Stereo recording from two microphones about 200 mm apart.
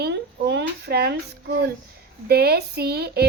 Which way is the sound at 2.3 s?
55° right (ahead or behind).